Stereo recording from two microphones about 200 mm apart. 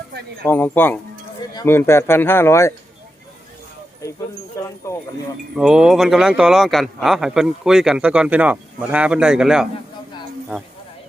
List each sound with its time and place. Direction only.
0.4 s speech: 10° left (ahead or behind)
4.6 s speech: 15° left (ahead or behind)
5.5 s a man's voice: 5° right (ahead or behind)